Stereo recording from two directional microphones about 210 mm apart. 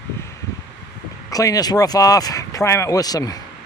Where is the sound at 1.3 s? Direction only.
15° left (ahead or behind).